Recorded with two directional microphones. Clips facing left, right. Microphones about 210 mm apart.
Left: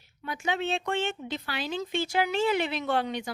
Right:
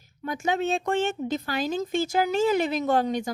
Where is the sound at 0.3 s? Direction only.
45° right (ahead or behind).